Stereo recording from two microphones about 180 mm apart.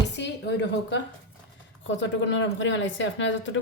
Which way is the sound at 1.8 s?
90° left.